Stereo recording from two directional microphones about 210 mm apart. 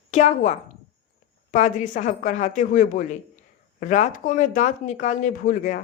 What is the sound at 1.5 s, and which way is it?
Speech, 35° left (ahead or behind).